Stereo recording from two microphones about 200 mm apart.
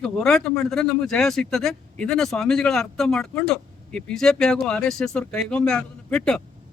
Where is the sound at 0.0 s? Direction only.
Centre (ahead or behind).